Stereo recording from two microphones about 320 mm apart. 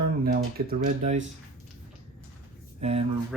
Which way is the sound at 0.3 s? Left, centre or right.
Right.